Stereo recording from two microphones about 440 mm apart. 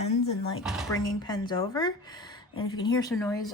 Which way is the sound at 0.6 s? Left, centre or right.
Centre.